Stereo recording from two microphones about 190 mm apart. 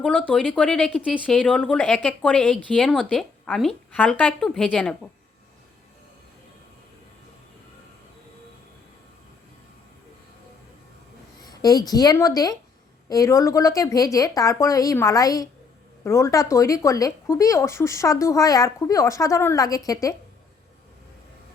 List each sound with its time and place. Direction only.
0.0 s speech: 5° left (ahead or behind)
11.4 s a woman's voice: 20° left (ahead or behind)